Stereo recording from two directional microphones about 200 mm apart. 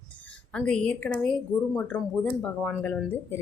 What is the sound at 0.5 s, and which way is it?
Speech, 5° left (ahead or behind).